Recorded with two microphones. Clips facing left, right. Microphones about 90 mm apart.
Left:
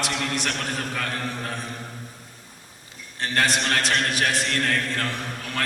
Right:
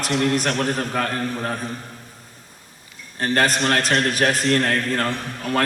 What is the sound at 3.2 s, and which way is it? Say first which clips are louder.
A man's voice: right 4 dB; 40° right (ahead or behind).